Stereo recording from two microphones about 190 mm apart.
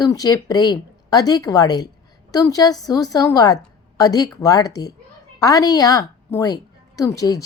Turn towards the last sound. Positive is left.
turn(degrees=20)  # may be behind; listen again after turning